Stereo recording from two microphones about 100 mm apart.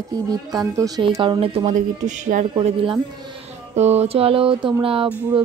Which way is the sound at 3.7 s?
90° right.